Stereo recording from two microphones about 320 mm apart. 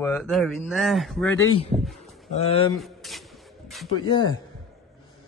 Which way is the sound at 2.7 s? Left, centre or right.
Centre.